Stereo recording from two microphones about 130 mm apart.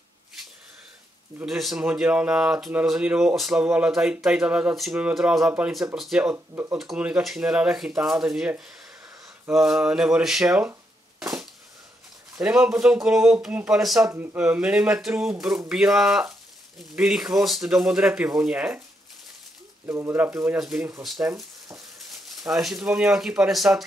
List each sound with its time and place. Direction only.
1.4 s speech: centre (ahead or behind)
6.3 s speech: 20° right (ahead or behind)
6.7 s speech: centre (ahead or behind)
12.4 s speech: 5° right (ahead or behind)
19.9 s speech: 20° right (ahead or behind)
20.5 s speech: 5° right (ahead or behind)
22.5 s speech: 5° right (ahead or behind)